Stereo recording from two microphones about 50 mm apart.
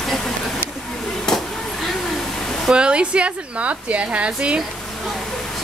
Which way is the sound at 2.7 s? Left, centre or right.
Centre.